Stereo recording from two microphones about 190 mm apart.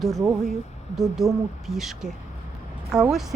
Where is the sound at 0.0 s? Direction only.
Centre (ahead or behind).